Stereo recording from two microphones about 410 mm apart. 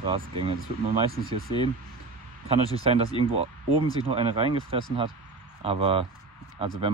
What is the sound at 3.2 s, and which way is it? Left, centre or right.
Speech, centre.